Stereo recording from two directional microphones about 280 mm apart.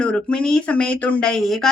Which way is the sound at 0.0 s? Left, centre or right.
Centre.